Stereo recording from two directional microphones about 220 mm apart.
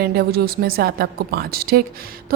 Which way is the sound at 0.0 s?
45° right (ahead or behind).